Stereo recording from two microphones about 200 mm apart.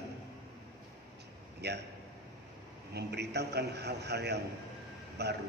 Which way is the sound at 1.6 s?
55° right (ahead or behind).